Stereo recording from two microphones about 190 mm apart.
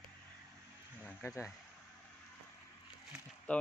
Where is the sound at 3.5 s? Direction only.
5° left (ahead or behind).